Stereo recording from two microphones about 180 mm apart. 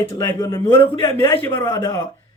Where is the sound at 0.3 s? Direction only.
20° left (ahead or behind).